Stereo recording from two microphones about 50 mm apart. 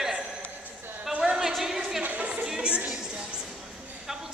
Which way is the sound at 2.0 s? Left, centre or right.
Right.